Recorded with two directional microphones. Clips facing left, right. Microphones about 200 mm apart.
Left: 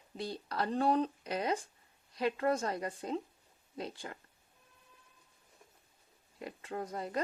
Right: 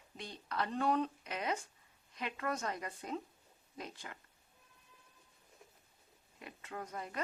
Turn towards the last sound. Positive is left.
turn(degrees=35)  # may be behind; listen again after turning